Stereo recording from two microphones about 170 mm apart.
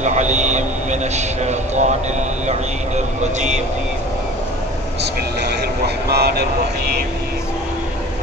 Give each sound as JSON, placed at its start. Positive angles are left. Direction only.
{"t": 0.0, "sound": "vehicle", "side_deg": -45}
{"t": 1.1, "sound": "a man's voice", "side_deg": -40}
{"t": 3.2, "sound": "speech", "side_deg": -45}
{"t": 6.0, "sound": "speech", "side_deg": -70}